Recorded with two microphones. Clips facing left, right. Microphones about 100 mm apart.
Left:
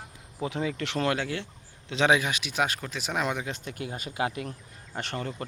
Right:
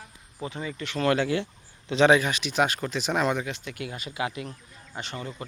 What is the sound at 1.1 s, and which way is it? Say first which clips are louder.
Speech: right 6 dB; 5° right (ahead or behind).